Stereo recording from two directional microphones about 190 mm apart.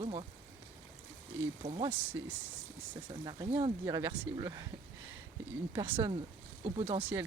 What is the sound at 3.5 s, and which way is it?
Speech, 30° right (ahead or behind).